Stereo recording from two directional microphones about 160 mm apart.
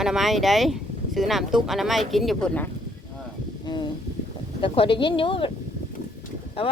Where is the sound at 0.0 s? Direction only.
Centre (ahead or behind).